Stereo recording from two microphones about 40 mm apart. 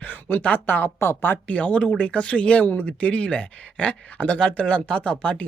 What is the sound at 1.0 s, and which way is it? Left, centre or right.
Speech, left.